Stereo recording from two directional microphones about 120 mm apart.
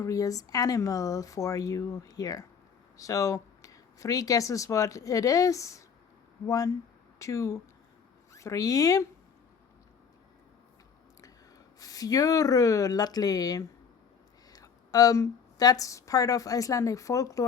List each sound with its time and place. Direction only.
0.0 s speech: 30° left (ahead or behind)
11.8 s a woman's voice: 30° left (ahead or behind)